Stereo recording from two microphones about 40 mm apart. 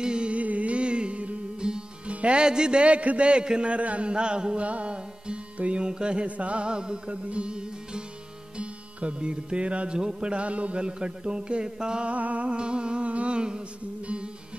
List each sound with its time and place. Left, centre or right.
0.0 s music: right
0.4 s music: right
1.7 s speech: right
4.6 s music: right
6.3 s speech: right
12.1 s speech: right
14.0 s music: right